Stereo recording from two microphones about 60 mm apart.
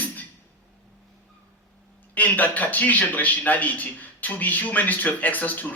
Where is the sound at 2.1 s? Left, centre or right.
Left.